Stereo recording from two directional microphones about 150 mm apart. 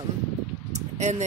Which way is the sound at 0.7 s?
50° right (ahead or behind).